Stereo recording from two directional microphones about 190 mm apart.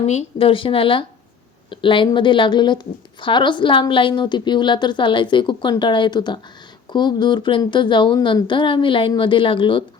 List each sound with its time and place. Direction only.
0.0 s a woman's voice: 35° left (ahead or behind)